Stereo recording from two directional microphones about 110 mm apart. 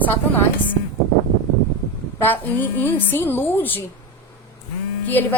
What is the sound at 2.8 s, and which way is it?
A woman's voice, 15° left (ahead or behind).